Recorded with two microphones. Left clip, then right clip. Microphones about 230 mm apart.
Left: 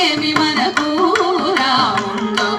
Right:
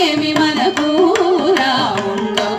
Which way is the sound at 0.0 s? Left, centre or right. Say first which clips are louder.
Right 1 dB; right.